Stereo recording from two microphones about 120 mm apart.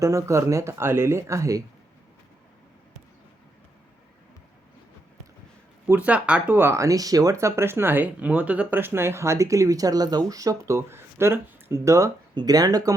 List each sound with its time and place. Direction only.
0.0 s speech: 25° right (ahead or behind)
5.9 s speech: 10° right (ahead or behind); by 12.9 s 30° right (ahead or behind)